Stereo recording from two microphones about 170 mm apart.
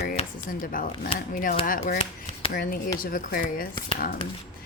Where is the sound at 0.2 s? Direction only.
35° left (ahead or behind).